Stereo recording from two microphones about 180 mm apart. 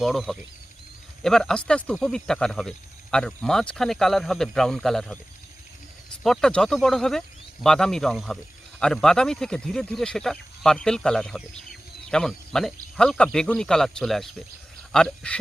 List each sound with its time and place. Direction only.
0.0 s speech: centre (ahead or behind)
6.2 s speech: 5° left (ahead or behind)